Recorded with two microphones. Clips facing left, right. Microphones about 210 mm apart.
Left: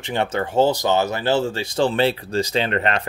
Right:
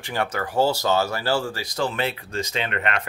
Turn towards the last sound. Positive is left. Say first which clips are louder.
# left 5 dB
turn(degrees=35)  # may be behind; listen again after turning